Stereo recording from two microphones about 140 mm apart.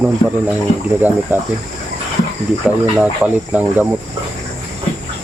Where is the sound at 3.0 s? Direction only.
10° right (ahead or behind).